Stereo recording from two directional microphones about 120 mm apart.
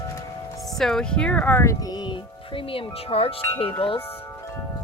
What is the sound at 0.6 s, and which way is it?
A woman's voice, centre (ahead or behind).